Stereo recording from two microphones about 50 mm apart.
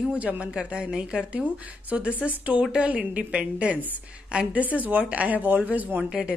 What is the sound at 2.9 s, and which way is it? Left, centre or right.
A woman's voice, right.